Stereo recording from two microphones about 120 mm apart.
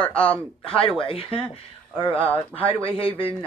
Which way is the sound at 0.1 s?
10° left (ahead or behind).